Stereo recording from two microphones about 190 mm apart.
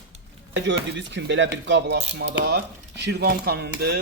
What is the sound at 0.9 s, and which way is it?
Speech, 70° right (ahead or behind).